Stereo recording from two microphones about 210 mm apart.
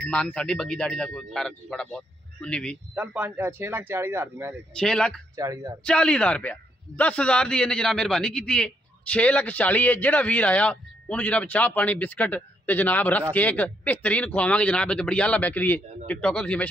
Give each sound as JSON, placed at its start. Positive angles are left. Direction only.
{"t": 0.1, "sound": "a man's voice", "side_deg": 5}
{"t": 2.9, "sound": "speech", "side_deg": -10}
{"t": 4.7, "sound": "a man's voice", "side_deg": 5}
{"t": 5.3, "sound": "speech", "side_deg": -15}
{"t": 5.9, "sound": "a man's voice", "side_deg": 5}